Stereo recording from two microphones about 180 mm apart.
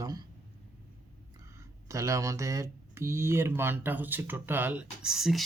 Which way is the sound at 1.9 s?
15° right (ahead or behind).